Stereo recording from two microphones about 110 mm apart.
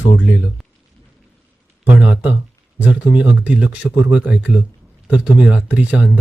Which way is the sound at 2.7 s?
15° right (ahead or behind).